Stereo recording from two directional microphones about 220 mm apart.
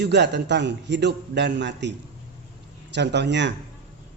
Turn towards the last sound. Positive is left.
turn(degrees=-55)  # may be behind; listen again after turning